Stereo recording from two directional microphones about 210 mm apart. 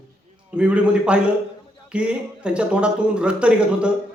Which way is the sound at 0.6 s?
5° right (ahead or behind).